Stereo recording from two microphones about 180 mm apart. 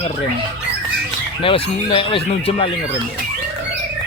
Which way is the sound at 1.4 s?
30° left (ahead or behind).